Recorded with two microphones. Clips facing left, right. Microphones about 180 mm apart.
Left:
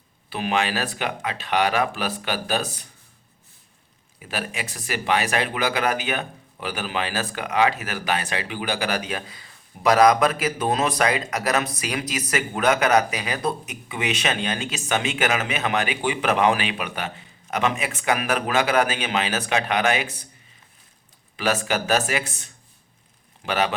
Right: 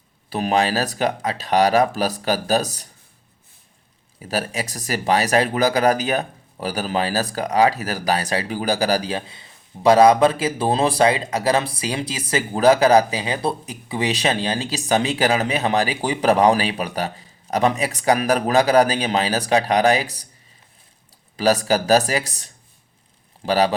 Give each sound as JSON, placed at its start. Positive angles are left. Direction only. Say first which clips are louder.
{"t": 0.3, "sound": "speech", "louder": "right 4 dB", "side_deg": -40}
{"t": 4.2, "sound": "speech", "louder": "right 5 dB", "side_deg": -40}
{"t": 21.3, "sound": "speech", "louder": "right 6 dB", "side_deg": -35}
{"t": 23.5, "sound": "speech", "louder": "right 5 dB", "side_deg": -35}